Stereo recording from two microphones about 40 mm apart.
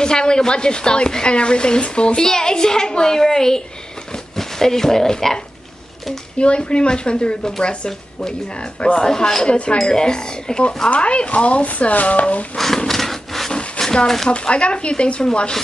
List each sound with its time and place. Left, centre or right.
0.0 s a woman's voice: centre
6.3 s a woman's voice: left
9.0 s a woman's voice: centre; by 12.4 s left
12.5 s wood: centre
13.5 s a sound: centre
14.0 s speech: centre
14.3 s a woman's voice: left